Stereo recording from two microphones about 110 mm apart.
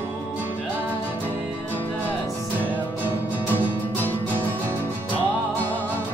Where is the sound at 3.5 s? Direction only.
15° left (ahead or behind).